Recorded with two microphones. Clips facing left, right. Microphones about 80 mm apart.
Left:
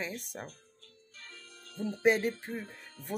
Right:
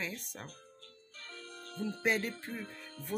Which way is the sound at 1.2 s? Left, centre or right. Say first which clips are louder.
Right 4 dB; right.